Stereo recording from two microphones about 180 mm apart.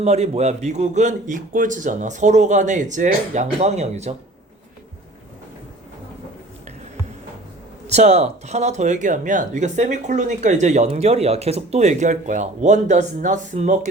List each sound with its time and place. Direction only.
0.0 s a man's voice: 35° right (ahead or behind)
7.9 s a man's voice: 40° right (ahead or behind)